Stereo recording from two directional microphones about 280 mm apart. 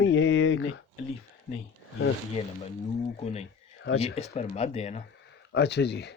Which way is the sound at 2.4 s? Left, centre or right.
Left.